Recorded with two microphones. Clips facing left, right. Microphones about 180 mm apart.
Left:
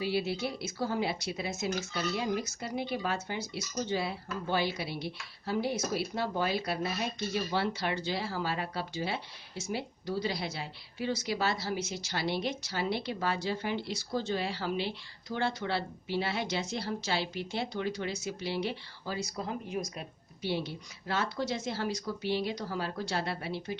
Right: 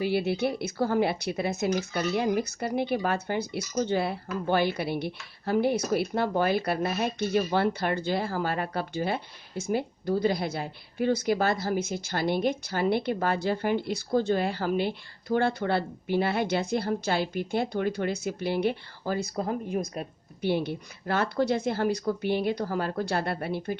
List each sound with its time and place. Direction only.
0.0 s speech: 55° right (ahead or behind)